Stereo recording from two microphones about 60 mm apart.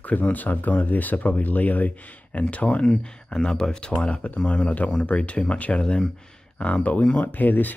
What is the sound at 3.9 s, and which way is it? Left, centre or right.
Speech, left.